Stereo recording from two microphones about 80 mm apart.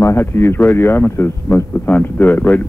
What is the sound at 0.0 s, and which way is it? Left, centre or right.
A man's voice, left.